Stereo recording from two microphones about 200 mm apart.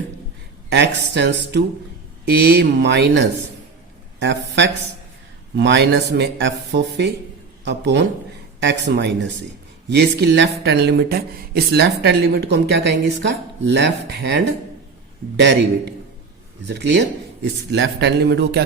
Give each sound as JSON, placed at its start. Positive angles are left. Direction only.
{"t": 0.7, "sound": "a man's voice", "side_deg": -60}